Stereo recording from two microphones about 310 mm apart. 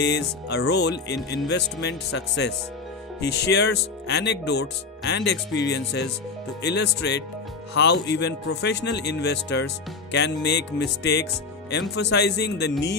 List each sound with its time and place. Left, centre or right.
0.0 s speech: left